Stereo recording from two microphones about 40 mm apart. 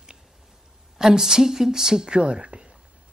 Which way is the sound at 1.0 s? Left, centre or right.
Centre.